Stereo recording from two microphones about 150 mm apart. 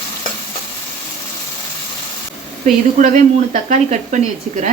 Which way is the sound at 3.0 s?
55° right (ahead or behind).